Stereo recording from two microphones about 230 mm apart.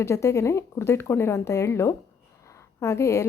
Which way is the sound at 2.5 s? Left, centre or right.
Centre.